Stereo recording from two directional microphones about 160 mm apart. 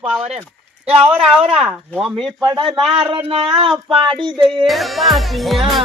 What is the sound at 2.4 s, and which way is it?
Speech, 25° right (ahead or behind).